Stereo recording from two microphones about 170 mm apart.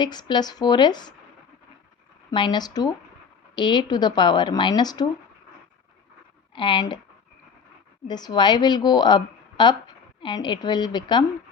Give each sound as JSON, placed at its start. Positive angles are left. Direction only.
{"t": 0.0, "sound": "a woman's voice", "side_deg": 25}
{"t": 2.3, "sound": "a woman's voice", "side_deg": 25}
{"t": 6.5, "sound": "speech", "side_deg": 30}
{"t": 8.0, "sound": "a woman's voice", "side_deg": 25}